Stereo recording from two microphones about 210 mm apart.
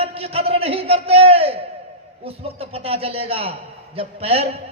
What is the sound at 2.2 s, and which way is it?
A man's voice, 30° right (ahead or behind).